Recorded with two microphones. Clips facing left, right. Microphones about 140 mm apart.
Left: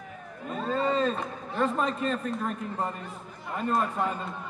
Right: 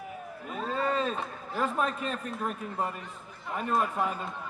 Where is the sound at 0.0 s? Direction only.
5° right (ahead or behind).